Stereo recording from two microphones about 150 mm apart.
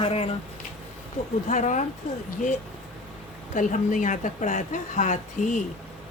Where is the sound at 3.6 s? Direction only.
60° left (ahead or behind).